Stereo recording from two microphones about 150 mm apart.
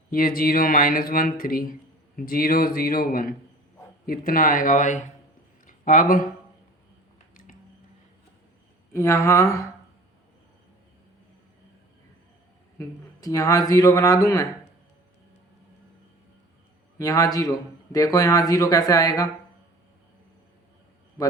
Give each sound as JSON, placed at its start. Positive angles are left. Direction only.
{"t": 0.1, "sound": "speech", "side_deg": 70}
{"t": 5.6, "sound": "a sound", "side_deg": 60}
{"t": 8.9, "sound": "a man's voice", "side_deg": 20}
{"t": 12.8, "sound": "a man's voice", "side_deg": 25}
{"t": 17.0, "sound": "a man's voice", "side_deg": 25}